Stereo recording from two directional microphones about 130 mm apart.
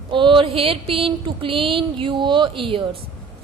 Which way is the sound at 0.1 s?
40° right (ahead or behind).